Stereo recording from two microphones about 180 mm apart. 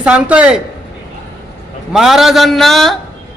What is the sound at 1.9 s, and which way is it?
A man's voice, centre (ahead or behind).